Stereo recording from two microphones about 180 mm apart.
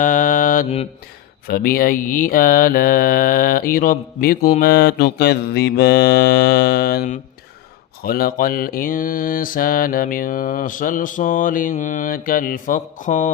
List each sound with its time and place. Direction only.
0.0 s mantra: 50° left (ahead or behind)